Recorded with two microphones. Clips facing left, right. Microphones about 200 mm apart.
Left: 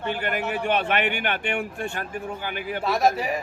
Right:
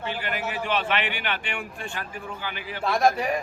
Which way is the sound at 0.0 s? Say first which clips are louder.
Left 3 dB; 50° left (ahead or behind).